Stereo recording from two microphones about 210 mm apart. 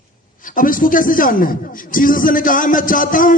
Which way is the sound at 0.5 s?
40° left (ahead or behind).